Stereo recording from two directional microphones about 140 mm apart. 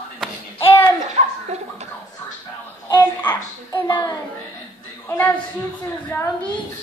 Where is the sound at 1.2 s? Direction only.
55° right (ahead or behind).